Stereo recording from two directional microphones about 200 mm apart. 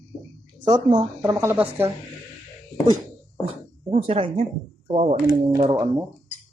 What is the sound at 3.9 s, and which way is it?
Speech, 30° right (ahead or behind).